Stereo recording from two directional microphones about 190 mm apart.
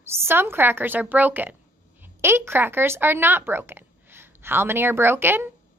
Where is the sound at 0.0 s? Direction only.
10° right (ahead or behind).